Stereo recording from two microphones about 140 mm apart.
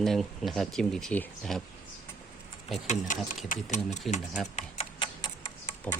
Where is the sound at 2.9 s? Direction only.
65° left (ahead or behind).